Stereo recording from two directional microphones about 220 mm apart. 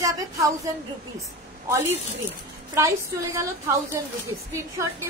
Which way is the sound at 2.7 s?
15° right (ahead or behind).